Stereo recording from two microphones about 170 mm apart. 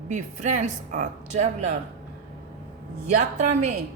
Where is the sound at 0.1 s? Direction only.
45° right (ahead or behind).